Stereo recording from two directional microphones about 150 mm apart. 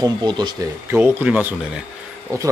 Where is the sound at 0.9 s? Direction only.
10° right (ahead or behind).